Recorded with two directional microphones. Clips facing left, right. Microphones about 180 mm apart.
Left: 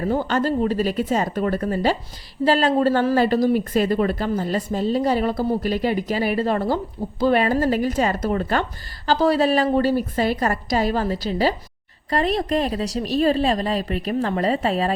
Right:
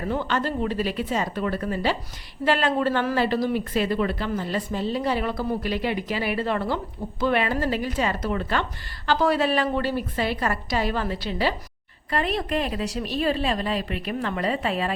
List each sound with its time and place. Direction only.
0.0 s a woman's voice: 40° left (ahead or behind)